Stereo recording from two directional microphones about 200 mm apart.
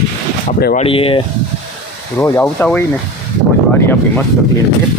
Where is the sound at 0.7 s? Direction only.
30° left (ahead or behind).